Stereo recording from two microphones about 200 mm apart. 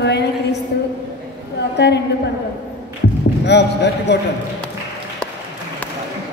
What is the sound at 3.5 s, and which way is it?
Speech, 60° left (ahead or behind).